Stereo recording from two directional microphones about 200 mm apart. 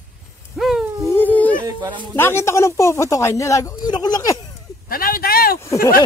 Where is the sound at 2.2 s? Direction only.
10° left (ahead or behind).